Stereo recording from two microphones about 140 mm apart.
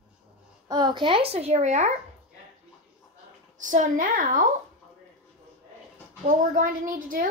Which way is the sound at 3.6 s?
65° right (ahead or behind).